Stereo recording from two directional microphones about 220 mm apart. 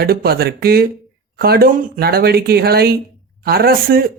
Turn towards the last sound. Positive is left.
turn(degrees=-40)  # may be behind; listen again after turning